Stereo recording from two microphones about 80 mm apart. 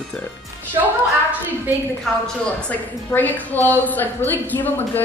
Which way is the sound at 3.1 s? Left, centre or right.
Left.